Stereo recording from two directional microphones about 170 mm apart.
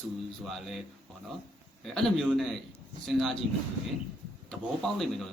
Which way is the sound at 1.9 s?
Centre (ahead or behind).